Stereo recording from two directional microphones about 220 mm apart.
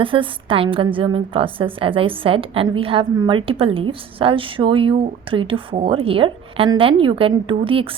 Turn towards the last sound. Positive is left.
turn(degrees=-25)  # may be behind; listen again after turning